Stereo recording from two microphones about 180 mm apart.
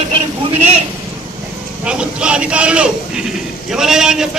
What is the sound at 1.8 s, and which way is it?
A man's voice, 5° right (ahead or behind).